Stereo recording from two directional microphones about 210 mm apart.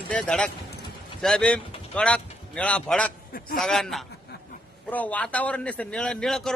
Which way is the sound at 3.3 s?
45° left (ahead or behind).